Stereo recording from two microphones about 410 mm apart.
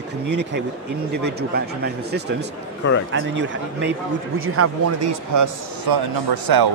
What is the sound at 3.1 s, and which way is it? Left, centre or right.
Speech, right.